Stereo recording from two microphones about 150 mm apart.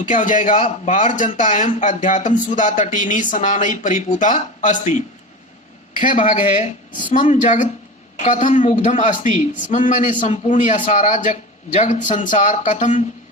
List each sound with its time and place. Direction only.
0.0 s speech: 60° left (ahead or behind)